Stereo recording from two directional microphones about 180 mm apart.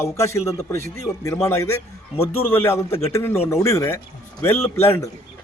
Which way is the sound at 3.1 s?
15° left (ahead or behind).